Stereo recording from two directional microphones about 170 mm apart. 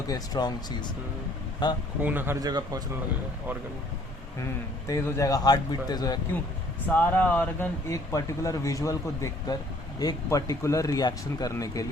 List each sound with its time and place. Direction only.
0.1 s speech: 25° left (ahead or behind)
1.6 s speech: 25° left (ahead or behind)
2.0 s speech: 10° right (ahead or behind)
4.9 s speech: 20° left (ahead or behind)
6.8 s speech: 10° left (ahead or behind)